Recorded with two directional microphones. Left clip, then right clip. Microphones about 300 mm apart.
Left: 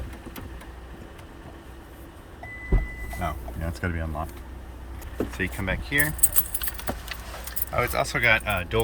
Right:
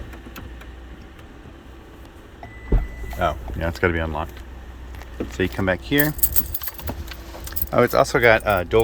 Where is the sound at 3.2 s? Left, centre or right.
Centre.